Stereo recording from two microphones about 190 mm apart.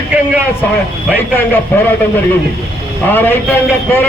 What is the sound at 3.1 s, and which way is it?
Speech, 10° left (ahead or behind).